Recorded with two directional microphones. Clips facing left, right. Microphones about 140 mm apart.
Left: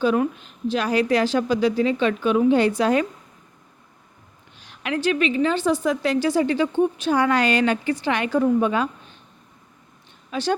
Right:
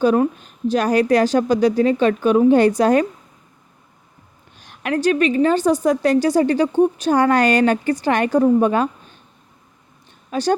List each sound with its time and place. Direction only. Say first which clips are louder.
0.0 s a woman's voice: right 4 dB; 45° right (ahead or behind)
4.6 s a woman's voice: right 5 dB; 50° right (ahead or behind)
10.3 s a woman's voice: right 5 dB; 40° right (ahead or behind)